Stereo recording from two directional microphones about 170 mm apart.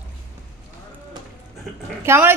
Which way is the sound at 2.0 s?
15° right (ahead or behind).